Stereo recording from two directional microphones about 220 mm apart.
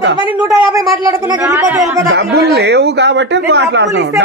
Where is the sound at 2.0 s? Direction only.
50° right (ahead or behind).